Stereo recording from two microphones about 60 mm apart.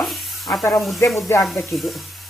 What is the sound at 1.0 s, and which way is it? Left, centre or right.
Stir, left.